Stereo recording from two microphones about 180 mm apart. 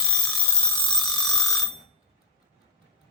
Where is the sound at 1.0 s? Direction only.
Centre (ahead or behind).